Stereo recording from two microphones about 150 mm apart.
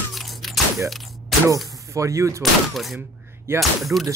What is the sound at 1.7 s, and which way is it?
Speech, 20° right (ahead or behind).